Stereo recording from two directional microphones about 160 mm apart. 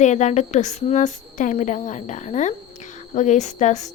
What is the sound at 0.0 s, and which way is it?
A woman's voice, 50° left (ahead or behind).